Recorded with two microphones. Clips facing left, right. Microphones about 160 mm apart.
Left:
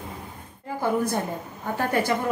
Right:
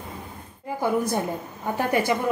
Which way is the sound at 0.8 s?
15° right (ahead or behind).